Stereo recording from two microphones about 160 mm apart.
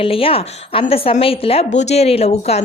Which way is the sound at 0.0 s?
35° left (ahead or behind).